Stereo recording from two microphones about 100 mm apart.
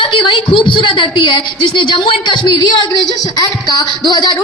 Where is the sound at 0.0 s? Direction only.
55° left (ahead or behind).